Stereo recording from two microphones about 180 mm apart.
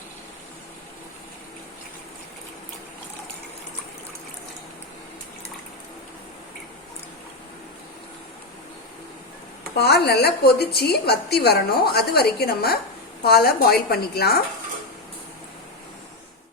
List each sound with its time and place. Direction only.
9.7 s a woman's voice: 65° left (ahead or behind)